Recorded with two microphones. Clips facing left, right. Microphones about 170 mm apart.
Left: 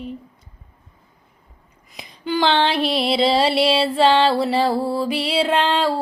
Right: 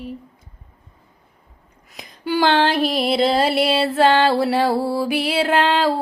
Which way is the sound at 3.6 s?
50° right (ahead or behind).